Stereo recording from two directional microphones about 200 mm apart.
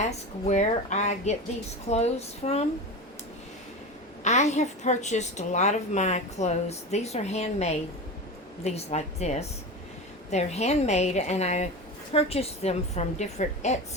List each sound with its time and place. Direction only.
0.4 s a woman's voice: 35° left (ahead or behind)
4.2 s a woman's voice: 35° left (ahead or behind)